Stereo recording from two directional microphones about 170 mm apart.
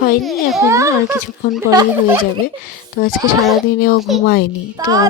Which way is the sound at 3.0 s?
50° left (ahead or behind).